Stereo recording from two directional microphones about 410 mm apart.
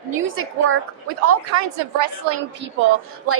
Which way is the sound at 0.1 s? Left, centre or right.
Right.